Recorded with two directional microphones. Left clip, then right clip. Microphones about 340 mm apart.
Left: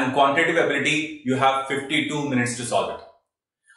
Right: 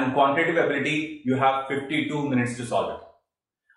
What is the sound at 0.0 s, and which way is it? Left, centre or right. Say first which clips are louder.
A man's voice: left 2 dB; centre.